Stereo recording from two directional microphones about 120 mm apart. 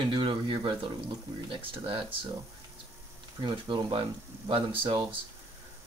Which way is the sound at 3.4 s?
40° right (ahead or behind).